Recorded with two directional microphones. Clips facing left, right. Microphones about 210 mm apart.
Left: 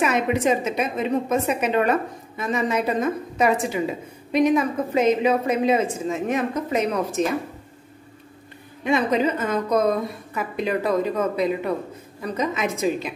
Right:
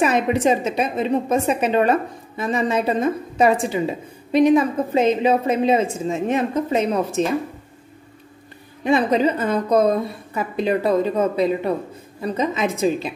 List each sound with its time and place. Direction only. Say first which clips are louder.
0.0 s a woman's voice: right 3 dB; 30° right (ahead or behind)
8.8 s a woman's voice: right 3 dB; 30° right (ahead or behind)